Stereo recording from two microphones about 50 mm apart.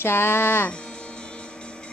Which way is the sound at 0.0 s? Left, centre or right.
Left.